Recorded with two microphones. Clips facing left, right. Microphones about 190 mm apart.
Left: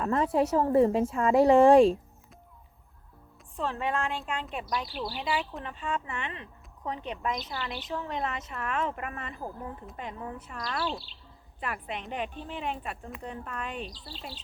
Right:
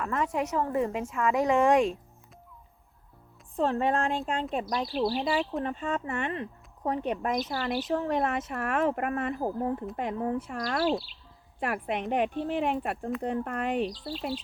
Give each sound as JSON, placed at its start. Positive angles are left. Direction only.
{"t": 0.0, "sound": "a woman's voice", "side_deg": 35}
{"t": 3.6, "sound": "speech", "side_deg": -45}
{"t": 14.0, "sound": "speech", "side_deg": -75}